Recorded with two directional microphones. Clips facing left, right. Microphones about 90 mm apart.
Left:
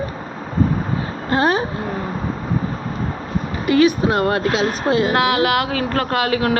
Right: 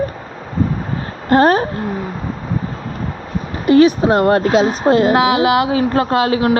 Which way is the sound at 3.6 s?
35° right (ahead or behind).